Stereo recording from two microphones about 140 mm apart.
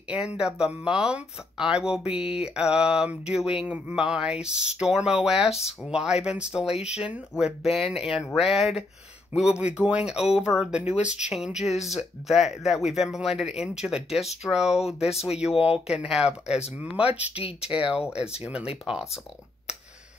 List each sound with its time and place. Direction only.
0.1 s speech: 5° right (ahead or behind)
15.0 s speech: 45° left (ahead or behind)
15.2 s speech: 5° right (ahead or behind)